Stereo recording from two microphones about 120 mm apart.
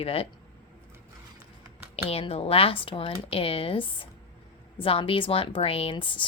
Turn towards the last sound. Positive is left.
turn(degrees=45)  # may be behind; listen again after turning